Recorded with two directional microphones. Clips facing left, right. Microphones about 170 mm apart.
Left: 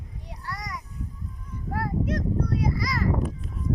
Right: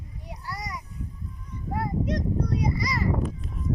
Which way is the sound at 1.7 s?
Centre (ahead or behind).